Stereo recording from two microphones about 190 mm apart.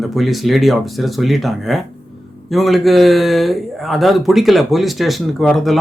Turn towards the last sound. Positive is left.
turn(degrees=0)  # may be behind; listen again after turning